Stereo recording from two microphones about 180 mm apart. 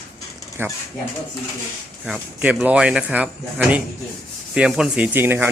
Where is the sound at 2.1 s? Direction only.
5° right (ahead or behind).